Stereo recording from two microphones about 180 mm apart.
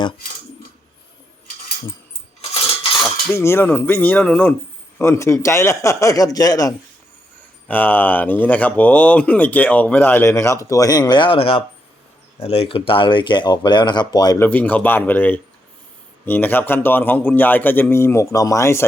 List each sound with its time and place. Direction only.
3.3 s speech: 15° left (ahead or behind)
7.7 s speech: 10° left (ahead or behind)
14.4 s speech: 10° left (ahead or behind)